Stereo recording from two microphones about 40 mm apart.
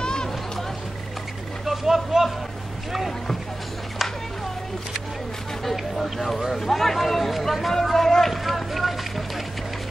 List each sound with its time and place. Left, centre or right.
0.0 s a sound: centre
1.7 s speech: centre
6.1 s speech: centre
7.7 s run: centre